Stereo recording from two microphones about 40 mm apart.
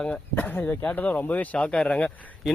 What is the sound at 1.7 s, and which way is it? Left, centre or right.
Speech, left.